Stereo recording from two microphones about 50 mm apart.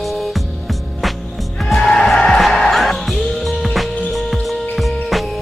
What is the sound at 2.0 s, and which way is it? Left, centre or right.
Music, centre.